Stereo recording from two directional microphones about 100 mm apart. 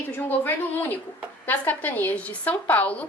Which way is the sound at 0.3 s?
20° left (ahead or behind).